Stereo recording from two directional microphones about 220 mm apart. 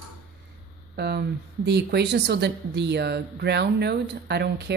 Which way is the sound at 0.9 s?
50° right (ahead or behind).